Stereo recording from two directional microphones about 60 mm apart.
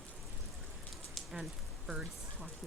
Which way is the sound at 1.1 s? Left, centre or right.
Centre.